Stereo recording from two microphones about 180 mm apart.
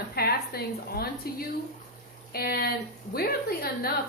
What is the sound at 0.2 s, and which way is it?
A woman's voice, 60° left (ahead or behind).